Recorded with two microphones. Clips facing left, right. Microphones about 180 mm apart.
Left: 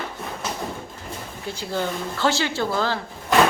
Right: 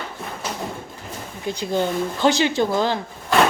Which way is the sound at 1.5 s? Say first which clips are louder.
Right 5 dB; 20° right (ahead or behind).